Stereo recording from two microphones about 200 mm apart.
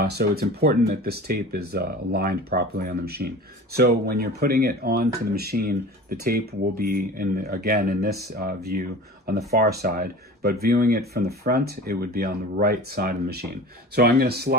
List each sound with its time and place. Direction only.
0.0 s speech: 55° right (ahead or behind)